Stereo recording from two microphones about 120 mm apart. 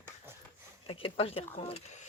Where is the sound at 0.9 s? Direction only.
50° left (ahead or behind).